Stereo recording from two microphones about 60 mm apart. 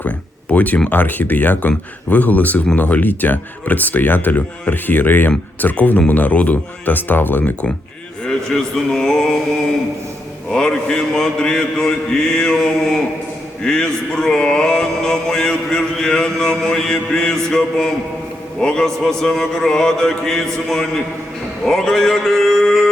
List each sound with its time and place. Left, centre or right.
0.5 s speech: left
8.3 s speech: centre
10.5 s speech: centre